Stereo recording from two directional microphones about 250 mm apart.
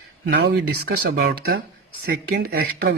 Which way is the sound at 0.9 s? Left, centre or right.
Right.